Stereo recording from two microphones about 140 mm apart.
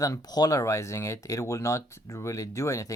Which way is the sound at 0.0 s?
25° left (ahead or behind).